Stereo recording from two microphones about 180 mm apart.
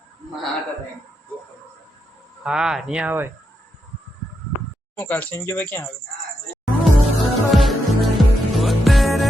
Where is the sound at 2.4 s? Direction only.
5° right (ahead or behind).